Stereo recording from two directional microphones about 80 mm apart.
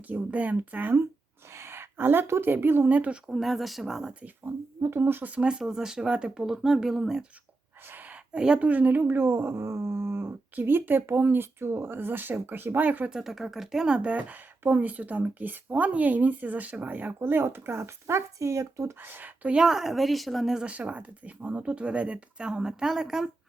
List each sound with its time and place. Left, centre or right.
0.1 s speech: centre
1.5 s speech: right; by 3.3 s centre
3.3 s speech: centre
4.4 s a woman's voice: right; by 7.3 s centre
7.9 s speech: right
13.1 s speech: centre; by 18.9 s right
19.0 s speech: right
19.6 s a woman's voice: centre